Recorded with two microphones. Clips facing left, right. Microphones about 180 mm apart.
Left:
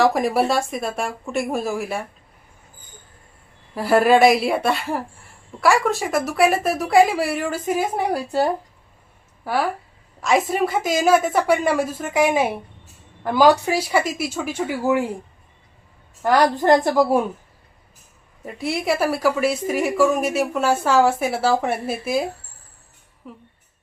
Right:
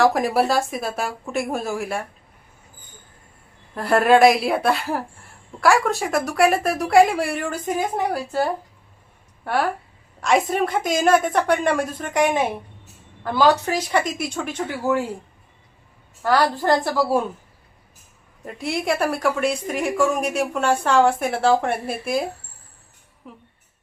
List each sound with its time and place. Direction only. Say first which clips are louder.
0.0 s a woman's voice: even; centre (ahead or behind)
3.8 s a woman's voice: even; 5° left (ahead or behind)
9.4 s a woman's voice: even; centre (ahead or behind)
16.2 s speech: left 2 dB; 15° left (ahead or behind)
18.4 s a woman's voice: left 1 dB; centre (ahead or behind)